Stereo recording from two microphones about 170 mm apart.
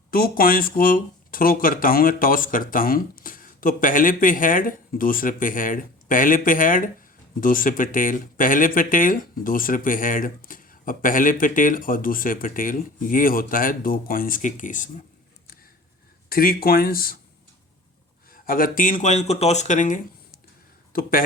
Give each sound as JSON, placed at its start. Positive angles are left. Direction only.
{"t": 0.1, "sound": "speech", "side_deg": 60}
{"t": 16.3, "sound": "speech", "side_deg": 60}
{"t": 18.3, "sound": "speech", "side_deg": 55}